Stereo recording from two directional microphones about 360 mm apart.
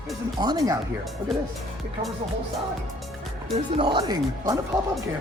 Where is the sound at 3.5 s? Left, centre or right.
Centre.